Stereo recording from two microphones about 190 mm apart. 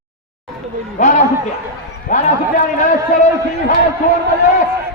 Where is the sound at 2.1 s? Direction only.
40° left (ahead or behind).